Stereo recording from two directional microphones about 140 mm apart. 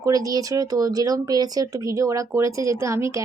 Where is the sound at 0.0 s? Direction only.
25° right (ahead or behind).